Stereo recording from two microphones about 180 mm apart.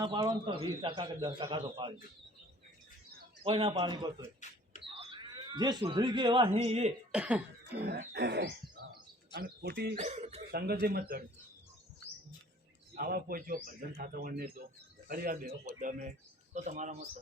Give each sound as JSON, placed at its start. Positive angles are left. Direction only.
{"t": 0.0, "sound": "a man's voice", "side_deg": -20}
{"t": 3.4, "sound": "a man's voice", "side_deg": -30}
{"t": 7.1, "sound": "speech", "side_deg": -5}
{"t": 8.1, "sound": "a sound", "side_deg": -65}
{"t": 8.9, "sound": "bird", "side_deg": -60}
{"t": 10.0, "sound": "speech", "side_deg": -40}
{"t": 10.5, "sound": "a man's voice", "side_deg": -60}
{"t": 13.0, "sound": "a man's voice", "side_deg": -55}
{"t": 16.6, "sound": "speech", "side_deg": -40}